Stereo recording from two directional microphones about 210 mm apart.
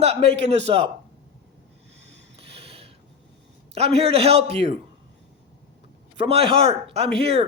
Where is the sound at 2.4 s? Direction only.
25° right (ahead or behind).